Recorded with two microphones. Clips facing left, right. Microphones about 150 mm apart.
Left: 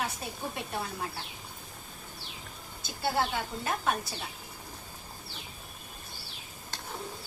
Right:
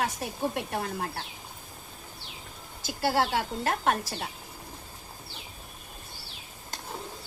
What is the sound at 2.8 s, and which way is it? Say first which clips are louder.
A woman's voice: right 4 dB; 75° right (ahead or behind).